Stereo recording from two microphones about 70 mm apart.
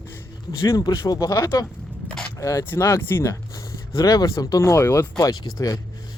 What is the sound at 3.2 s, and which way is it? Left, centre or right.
Speech, left.